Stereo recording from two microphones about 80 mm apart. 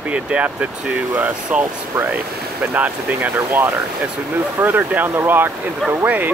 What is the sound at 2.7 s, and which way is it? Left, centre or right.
Speech, centre.